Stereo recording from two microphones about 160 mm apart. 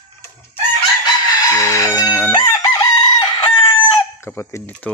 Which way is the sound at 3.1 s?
20° left (ahead or behind).